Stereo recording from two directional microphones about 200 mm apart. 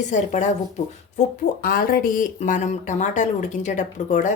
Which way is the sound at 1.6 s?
45° left (ahead or behind).